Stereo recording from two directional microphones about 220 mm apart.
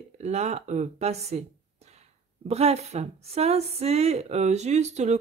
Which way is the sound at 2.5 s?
30° right (ahead or behind).